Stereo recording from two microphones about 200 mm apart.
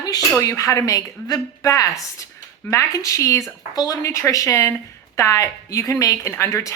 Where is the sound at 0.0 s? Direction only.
15° left (ahead or behind).